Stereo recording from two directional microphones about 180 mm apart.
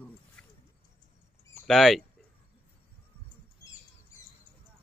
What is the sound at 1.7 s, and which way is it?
Speech, centre (ahead or behind).